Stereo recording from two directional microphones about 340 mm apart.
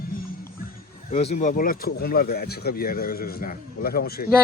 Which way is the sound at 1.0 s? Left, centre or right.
Centre.